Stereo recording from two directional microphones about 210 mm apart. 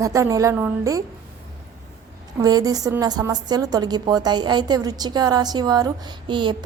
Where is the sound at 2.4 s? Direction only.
20° right (ahead or behind).